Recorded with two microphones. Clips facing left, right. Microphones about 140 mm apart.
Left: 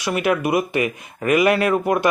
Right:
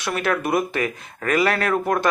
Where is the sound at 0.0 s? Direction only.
10° left (ahead or behind).